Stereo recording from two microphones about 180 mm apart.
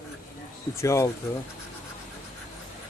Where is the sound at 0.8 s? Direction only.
15° left (ahead or behind).